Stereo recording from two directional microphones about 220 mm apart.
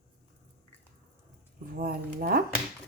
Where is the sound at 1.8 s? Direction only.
45° right (ahead or behind).